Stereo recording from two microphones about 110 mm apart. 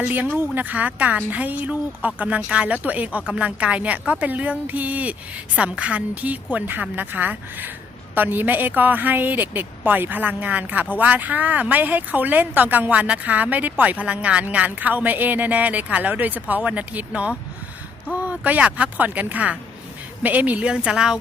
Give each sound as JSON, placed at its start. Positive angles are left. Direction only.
{"t": 0.0, "sound": "speech", "side_deg": -15}